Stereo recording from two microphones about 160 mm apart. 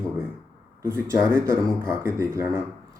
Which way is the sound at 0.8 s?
15° right (ahead or behind).